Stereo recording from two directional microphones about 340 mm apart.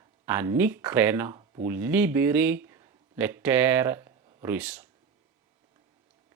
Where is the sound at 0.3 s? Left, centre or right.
Centre.